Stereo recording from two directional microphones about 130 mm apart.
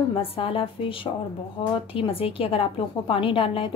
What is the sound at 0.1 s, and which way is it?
A woman's voice, 45° left (ahead or behind).